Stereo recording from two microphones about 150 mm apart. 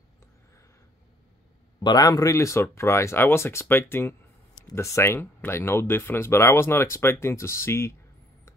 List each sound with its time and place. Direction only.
1.8 s speech: 30° left (ahead or behind)